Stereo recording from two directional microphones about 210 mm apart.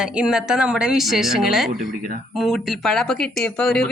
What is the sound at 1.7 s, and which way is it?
Speech, 40° right (ahead or behind).